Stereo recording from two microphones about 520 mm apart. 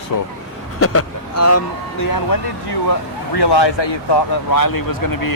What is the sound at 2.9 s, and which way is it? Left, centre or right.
Speech, left.